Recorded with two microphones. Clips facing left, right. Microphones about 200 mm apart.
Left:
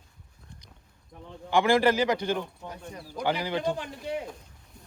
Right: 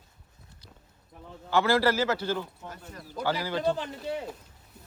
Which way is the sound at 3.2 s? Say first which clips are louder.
Left 2 dB; 20° left (ahead or behind).